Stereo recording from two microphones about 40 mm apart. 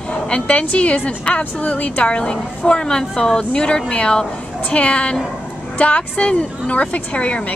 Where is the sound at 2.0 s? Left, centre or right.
Left.